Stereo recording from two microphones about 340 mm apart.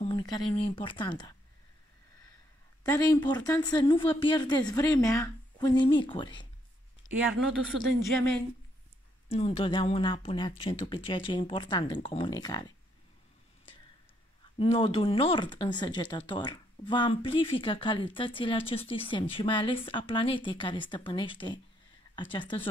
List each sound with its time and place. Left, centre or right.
0.0 s speech: centre
2.8 s speech: centre
7.5 s speech: right
9.3 s speech: centre
14.6 s speech: centre